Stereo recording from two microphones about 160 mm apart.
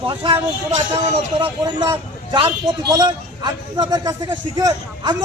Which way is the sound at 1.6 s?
30° right (ahead or behind).